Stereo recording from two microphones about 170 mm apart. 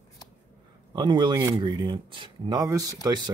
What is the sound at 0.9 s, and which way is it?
Speech, 25° right (ahead or behind).